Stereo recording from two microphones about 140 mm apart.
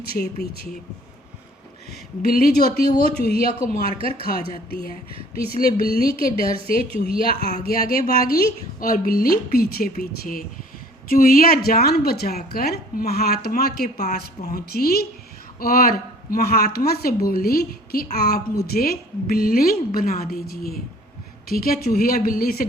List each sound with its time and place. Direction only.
0.0 s a woman's voice: 90° left
2.2 s a woman's voice: 90° left
3.9 s speech: 40° right (ahead or behind)
5.3 s a woman's voice: 90° left